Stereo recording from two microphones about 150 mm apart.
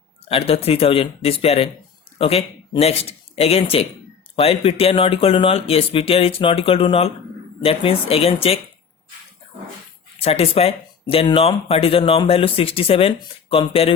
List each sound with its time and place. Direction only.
0.3 s speech: 40° left (ahead or behind)
10.2 s speech: 40° left (ahead or behind)